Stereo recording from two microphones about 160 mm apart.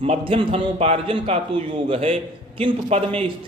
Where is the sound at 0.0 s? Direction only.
35° right (ahead or behind).